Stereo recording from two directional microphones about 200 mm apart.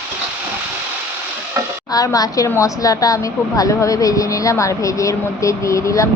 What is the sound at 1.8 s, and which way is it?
A woman's voice, 20° left (ahead or behind).